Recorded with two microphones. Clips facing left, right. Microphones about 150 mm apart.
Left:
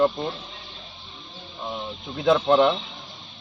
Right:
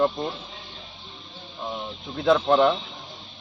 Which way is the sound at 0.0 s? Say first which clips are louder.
Left 2 dB; centre (ahead or behind).